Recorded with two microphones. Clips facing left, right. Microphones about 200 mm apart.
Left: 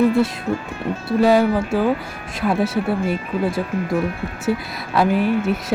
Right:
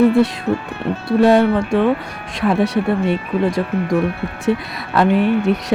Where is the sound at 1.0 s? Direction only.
5° left (ahead or behind).